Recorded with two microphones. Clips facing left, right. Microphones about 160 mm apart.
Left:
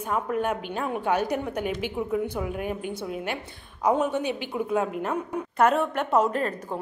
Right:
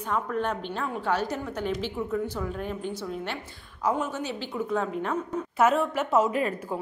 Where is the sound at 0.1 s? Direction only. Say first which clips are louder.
Left 2 dB; 10° left (ahead or behind).